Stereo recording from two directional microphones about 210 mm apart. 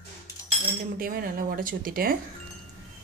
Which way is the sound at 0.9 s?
45° right (ahead or behind).